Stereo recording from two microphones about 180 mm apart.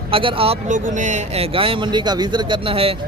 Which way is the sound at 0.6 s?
45° right (ahead or behind).